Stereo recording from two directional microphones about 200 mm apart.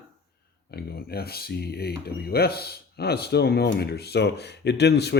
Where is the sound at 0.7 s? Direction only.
50° left (ahead or behind).